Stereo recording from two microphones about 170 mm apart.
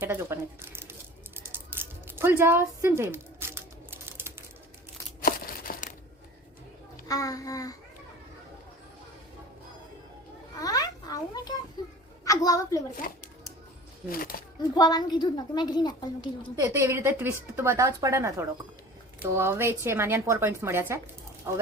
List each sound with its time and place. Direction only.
0.0 s a sound: 15° right (ahead or behind)
5.2 s crumpling: 60° left (ahead or behind)
7.1 s a woman's voice: 20° left (ahead or behind)
10.6 s a sound: 20° left (ahead or behind)
12.2 s a woman's voice: 20° left (ahead or behind)
14.1 s speech: 55° left (ahead or behind)
14.8 s a woman's voice: 25° left (ahead or behind)
16.6 s a woman's voice: 15° right (ahead or behind)